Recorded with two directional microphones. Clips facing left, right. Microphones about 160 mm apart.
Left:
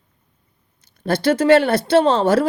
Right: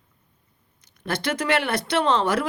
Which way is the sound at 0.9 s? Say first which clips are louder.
Left 9 dB; 30° left (ahead or behind).